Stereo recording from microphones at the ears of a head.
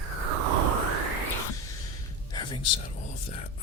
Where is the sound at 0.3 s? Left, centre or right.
Right.